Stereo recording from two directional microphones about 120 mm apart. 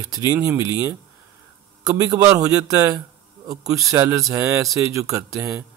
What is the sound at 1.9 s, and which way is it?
Speech, 30° right (ahead or behind).